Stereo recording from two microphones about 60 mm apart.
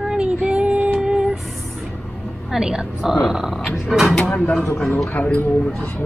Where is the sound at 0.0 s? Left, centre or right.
Centre.